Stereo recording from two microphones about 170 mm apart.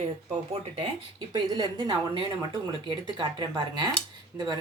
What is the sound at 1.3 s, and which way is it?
Speech, 25° right (ahead or behind).